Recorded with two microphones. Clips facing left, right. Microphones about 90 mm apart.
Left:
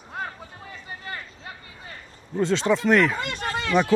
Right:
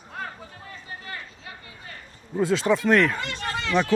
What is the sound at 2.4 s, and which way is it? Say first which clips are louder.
Speech: even; 5° right (ahead or behind).